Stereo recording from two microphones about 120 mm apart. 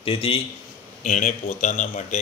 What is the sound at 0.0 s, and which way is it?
Speech, 50° left (ahead or behind).